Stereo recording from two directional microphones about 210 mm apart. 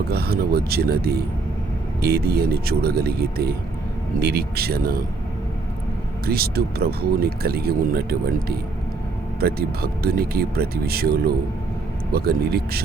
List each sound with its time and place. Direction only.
0.1 s speech: 50° right (ahead or behind)
6.2 s speech: 45° right (ahead or behind)